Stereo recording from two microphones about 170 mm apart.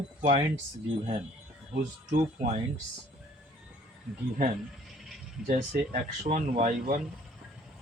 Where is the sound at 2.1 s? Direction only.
40° right (ahead or behind).